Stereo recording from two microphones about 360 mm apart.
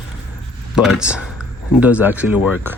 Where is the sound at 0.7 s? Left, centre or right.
Centre.